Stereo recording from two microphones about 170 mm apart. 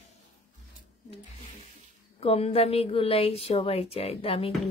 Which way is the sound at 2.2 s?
35° left (ahead or behind).